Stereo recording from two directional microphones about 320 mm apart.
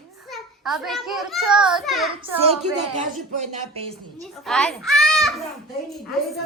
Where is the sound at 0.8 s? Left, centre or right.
Centre.